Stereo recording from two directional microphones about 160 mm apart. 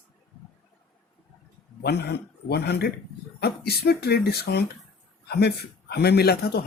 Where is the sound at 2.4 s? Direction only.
90° left.